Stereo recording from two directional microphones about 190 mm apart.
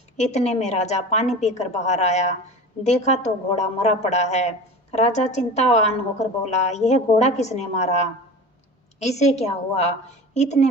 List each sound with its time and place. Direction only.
0.2 s a woman's voice: 35° left (ahead or behind)